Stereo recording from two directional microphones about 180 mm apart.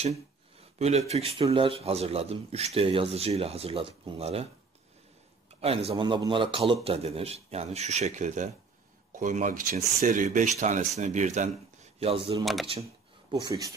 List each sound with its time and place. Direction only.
0.0 s speech: 35° right (ahead or behind)
5.6 s speech: 35° right (ahead or behind)
12.8 s a sound: 20° right (ahead or behind)